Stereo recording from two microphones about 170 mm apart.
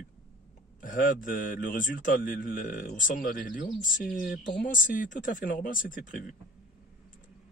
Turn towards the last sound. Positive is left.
turn(degrees=55)  # may be behind; listen again after turning